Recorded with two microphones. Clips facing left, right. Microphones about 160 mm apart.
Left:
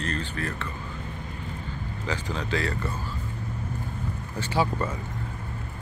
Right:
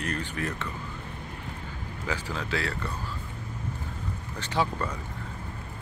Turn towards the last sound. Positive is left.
turn(degrees=5)  # may be behind; listen again after turning